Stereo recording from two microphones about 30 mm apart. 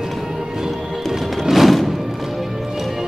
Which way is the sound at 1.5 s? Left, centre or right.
Centre.